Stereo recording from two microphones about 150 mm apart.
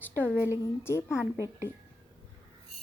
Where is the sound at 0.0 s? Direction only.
10° left (ahead or behind).